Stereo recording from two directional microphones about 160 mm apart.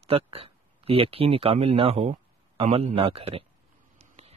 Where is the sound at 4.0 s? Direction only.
40° right (ahead or behind).